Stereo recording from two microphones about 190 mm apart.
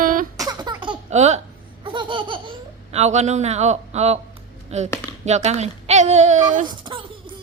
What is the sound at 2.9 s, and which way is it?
A man's voice, 35° right (ahead or behind).